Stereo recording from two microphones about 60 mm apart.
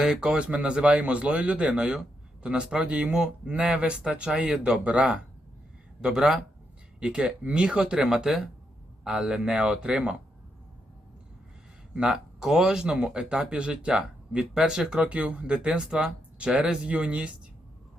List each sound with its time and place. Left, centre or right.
0.0 s a man's voice: centre
11.9 s speech: centre